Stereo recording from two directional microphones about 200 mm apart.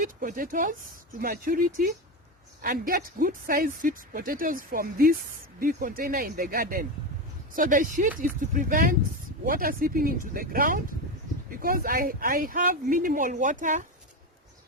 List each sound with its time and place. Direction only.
0.0 s a woman's voice: 45° right (ahead or behind)